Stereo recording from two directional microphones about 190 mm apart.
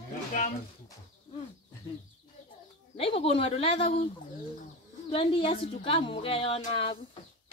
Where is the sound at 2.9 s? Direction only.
30° left (ahead or behind).